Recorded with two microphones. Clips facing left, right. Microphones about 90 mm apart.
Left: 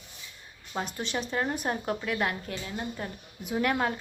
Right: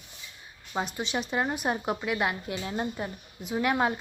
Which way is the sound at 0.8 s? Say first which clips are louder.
Right 2 dB; centre (ahead or behind).